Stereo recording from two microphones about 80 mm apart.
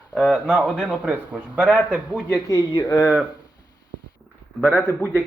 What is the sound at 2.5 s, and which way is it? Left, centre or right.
Speech, left.